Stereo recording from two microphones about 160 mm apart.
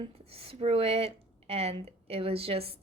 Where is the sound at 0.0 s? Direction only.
35° right (ahead or behind).